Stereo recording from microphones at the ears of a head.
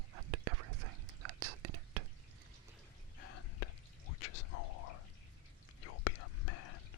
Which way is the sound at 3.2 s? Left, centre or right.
Left.